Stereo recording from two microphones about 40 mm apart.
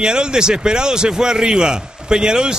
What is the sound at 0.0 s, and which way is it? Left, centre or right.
A man's voice, centre.